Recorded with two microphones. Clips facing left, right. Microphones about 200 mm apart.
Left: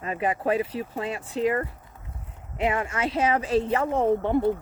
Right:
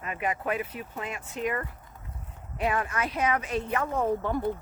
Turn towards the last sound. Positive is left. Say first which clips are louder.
# left 6 dB
turn(degrees=25)  # may be behind; listen again after turning